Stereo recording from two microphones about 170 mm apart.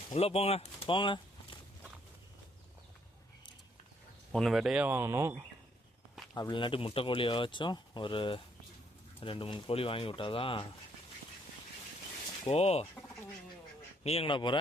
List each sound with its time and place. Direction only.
0.1 s speech: 35° left (ahead or behind)
4.3 s speech: centre (ahead or behind); by 5.3 s 15° right (ahead or behind)
6.3 s speech: 25° left (ahead or behind)
12.5 s speech: 40° left (ahead or behind)
14.0 s speech: 35° left (ahead or behind)